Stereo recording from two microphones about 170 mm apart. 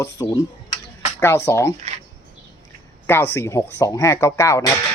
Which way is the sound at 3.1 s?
15° left (ahead or behind).